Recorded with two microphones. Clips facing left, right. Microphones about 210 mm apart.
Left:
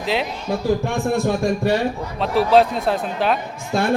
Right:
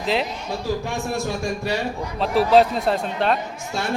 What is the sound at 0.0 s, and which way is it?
Speech, centre (ahead or behind).